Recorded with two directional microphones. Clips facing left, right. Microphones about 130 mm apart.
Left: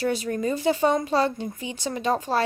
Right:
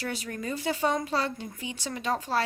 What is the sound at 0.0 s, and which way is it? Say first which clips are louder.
Speech: left 9 dB; 25° left (ahead or behind).